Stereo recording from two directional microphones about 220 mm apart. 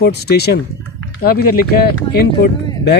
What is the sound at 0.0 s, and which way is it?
Speech, 45° left (ahead or behind).